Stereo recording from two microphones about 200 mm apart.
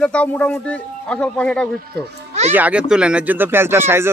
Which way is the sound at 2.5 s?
5° right (ahead or behind).